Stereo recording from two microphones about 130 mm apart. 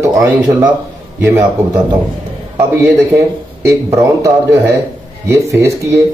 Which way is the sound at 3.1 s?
25° right (ahead or behind).